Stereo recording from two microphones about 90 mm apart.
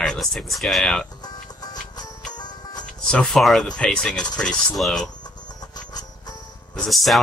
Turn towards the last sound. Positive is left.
turn(degrees=0)  # may be behind; listen again after turning